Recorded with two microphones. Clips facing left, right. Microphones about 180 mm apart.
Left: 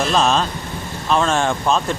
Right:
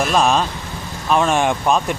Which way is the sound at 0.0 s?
10° right (ahead or behind).